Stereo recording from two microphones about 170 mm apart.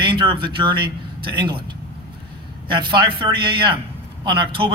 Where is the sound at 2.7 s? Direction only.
30° right (ahead or behind).